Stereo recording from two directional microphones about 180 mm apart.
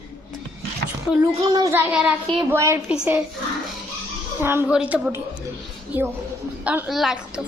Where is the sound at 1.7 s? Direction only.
5° right (ahead or behind).